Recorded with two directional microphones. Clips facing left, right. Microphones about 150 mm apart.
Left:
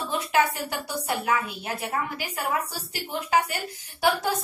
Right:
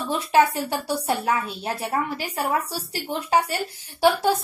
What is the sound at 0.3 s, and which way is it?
A woman's voice, 30° right (ahead or behind).